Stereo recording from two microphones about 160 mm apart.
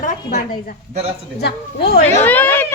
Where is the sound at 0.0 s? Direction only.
55° left (ahead or behind).